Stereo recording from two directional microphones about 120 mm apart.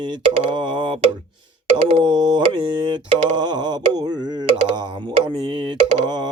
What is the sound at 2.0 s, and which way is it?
Speech, 40° right (ahead or behind).